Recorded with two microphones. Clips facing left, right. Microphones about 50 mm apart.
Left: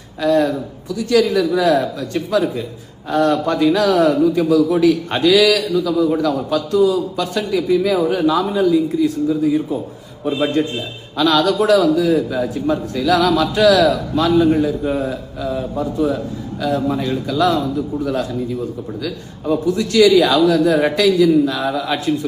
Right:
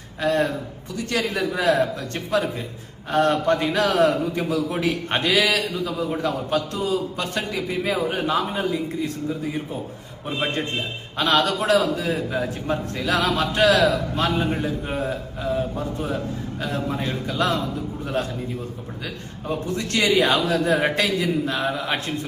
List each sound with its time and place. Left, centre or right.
0.2 s a man's voice: right